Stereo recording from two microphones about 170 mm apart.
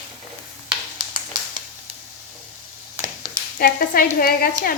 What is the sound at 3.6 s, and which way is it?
Speech, 60° left (ahead or behind).